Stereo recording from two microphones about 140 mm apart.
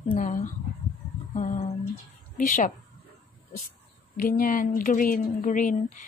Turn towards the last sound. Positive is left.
turn(degrees=65)  # may be behind; listen again after turning